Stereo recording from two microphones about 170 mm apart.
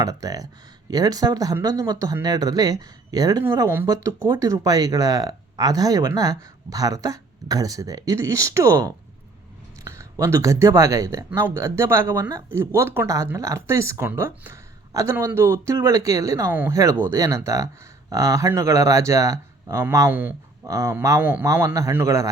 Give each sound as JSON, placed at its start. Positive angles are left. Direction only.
{"t": 0.0, "sound": "speech", "side_deg": -20}